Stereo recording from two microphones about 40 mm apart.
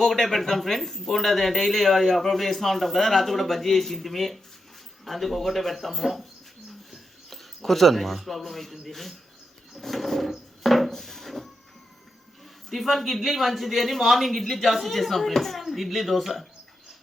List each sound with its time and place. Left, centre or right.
0.0 s speech: centre
10.6 s a sound: centre
12.7 s speech: centre